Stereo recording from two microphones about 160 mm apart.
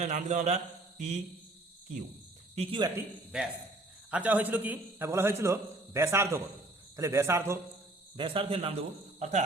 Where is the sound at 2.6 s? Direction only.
30° right (ahead or behind).